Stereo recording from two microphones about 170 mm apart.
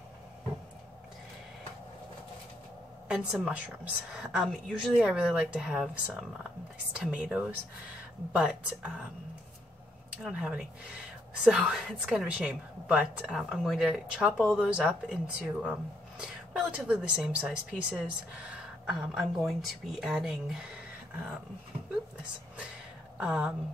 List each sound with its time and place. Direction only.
3.1 s a woman's voice: 5° right (ahead or behind)
10.2 s a woman's voice: 5° right (ahead or behind)
23.1 s speech: 5° right (ahead or behind)